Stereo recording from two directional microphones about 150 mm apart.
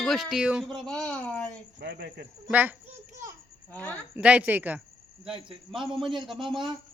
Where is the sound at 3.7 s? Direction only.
10° left (ahead or behind).